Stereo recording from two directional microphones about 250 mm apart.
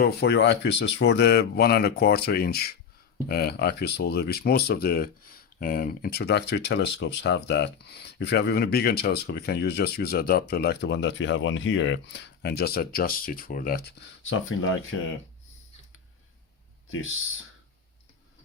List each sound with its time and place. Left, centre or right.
0.0 s speech: left
14.3 s speech: left